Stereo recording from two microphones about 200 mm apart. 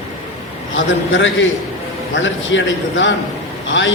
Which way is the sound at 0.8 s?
70° left (ahead or behind).